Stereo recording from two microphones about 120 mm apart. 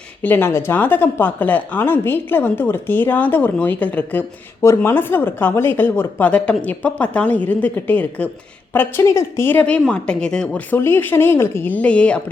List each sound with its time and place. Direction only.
0.2 s a woman's voice: 15° left (ahead or behind)